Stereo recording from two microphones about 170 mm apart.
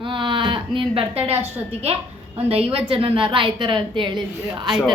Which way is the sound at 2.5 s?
35° right (ahead or behind).